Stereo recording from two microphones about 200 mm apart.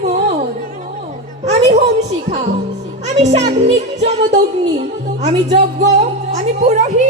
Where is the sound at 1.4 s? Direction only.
35° right (ahead or behind).